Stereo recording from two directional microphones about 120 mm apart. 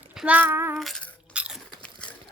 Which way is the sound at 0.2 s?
15° right (ahead or behind).